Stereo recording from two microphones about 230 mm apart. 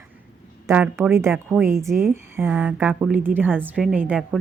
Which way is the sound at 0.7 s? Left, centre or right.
Centre.